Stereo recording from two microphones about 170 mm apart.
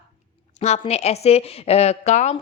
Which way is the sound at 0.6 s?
40° left (ahead or behind).